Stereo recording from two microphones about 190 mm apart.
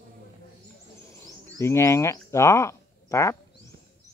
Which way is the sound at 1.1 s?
15° left (ahead or behind).